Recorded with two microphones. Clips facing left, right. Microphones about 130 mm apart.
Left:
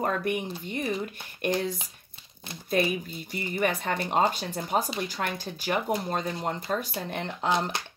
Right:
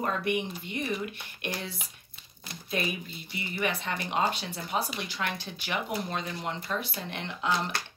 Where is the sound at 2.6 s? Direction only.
45° left (ahead or behind).